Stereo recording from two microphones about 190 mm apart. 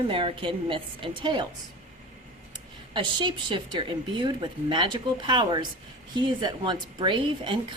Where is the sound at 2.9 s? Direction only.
25° right (ahead or behind).